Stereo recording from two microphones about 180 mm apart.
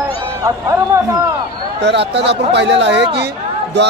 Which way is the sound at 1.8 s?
75° right (ahead or behind).